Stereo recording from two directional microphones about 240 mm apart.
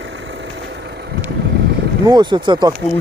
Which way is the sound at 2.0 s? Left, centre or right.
Centre.